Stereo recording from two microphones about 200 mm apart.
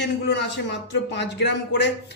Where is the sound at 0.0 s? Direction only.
60° left (ahead or behind).